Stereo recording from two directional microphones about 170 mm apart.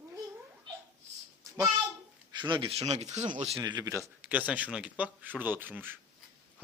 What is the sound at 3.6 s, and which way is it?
Speech, 20° right (ahead or behind).